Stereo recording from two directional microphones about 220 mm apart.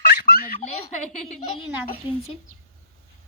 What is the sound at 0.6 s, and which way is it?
Speech, 30° left (ahead or behind).